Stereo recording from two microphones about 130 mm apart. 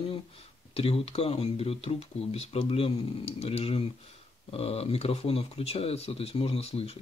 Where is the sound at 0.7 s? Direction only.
50° left (ahead or behind).